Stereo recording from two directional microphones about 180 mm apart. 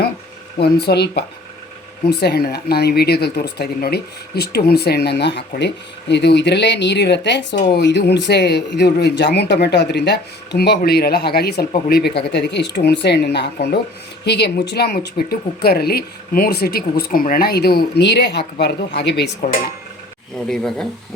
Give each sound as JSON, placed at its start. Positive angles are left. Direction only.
{"t": 0.6, "sound": "speech", "side_deg": 65}
{"t": 20.3, "sound": "speech", "side_deg": 0}